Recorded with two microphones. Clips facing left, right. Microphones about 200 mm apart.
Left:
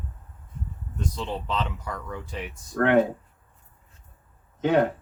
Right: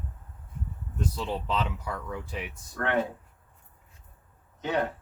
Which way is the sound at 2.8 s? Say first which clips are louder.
Left 8 dB; 50° left (ahead or behind).